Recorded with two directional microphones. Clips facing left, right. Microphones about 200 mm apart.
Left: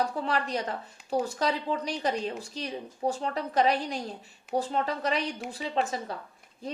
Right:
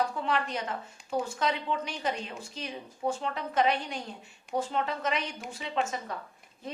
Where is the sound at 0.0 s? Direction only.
35° left (ahead or behind).